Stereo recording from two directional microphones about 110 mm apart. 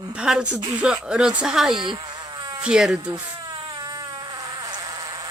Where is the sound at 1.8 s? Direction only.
45° right (ahead or behind).